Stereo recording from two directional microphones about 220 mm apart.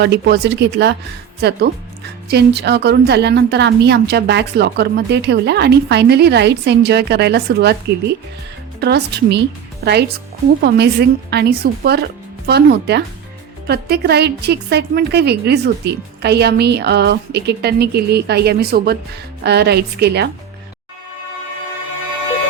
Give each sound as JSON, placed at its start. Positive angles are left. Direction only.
{"t": 0.0, "sound": "a woman's voice", "side_deg": -50}